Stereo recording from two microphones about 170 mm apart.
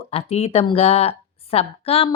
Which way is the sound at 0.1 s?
35° left (ahead or behind).